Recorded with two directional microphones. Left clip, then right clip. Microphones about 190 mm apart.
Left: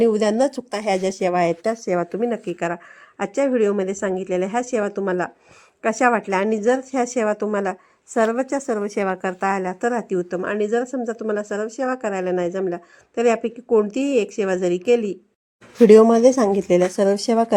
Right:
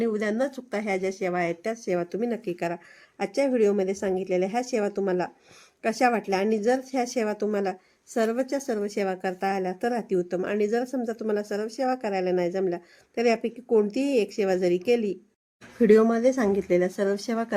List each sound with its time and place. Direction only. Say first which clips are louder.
0.0 s speech: left 9 dB; 35° left (ahead or behind)
1.6 s a woman's voice: left 6 dB; 5° left (ahead or behind)
10.8 s a woman's voice: left 5 dB; 5° right (ahead or behind)
11.3 s speech: left 4 dB; 10° left (ahead or behind)
15.9 s speech: left 8 dB; 30° left (ahead or behind)